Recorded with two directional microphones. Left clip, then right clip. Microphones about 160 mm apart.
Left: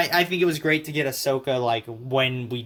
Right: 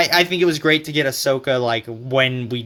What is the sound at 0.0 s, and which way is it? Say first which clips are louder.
Speech: right 5 dB; 25° right (ahead or behind).